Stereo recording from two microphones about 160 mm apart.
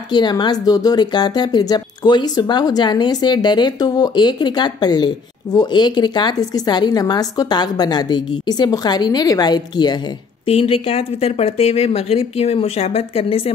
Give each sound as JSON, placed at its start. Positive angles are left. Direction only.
{"t": 0.1, "sound": "speech", "side_deg": 30}
{"t": 10.4, "sound": "speech", "side_deg": 35}